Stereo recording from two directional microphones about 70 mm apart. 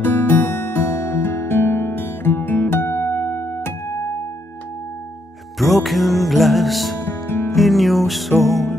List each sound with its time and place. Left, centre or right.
0.0 s music: left
5.6 s music: centre
7.0 s music: left
7.5 s music: centre